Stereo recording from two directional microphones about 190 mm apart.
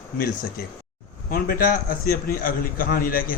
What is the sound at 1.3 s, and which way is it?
A man's voice, 50° left (ahead or behind).